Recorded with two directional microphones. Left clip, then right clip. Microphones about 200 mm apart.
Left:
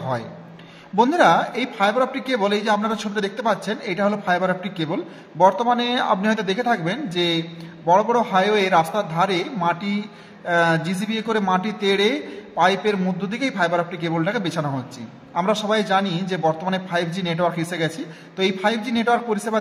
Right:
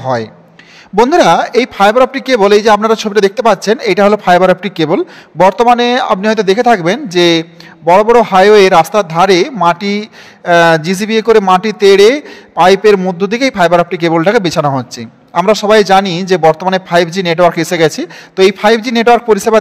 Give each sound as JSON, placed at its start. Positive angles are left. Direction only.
{"t": 0.9, "sound": "a man's voice", "side_deg": -45}